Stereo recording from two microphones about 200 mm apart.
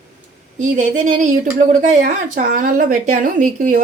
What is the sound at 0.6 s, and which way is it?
Speech, 40° right (ahead or behind).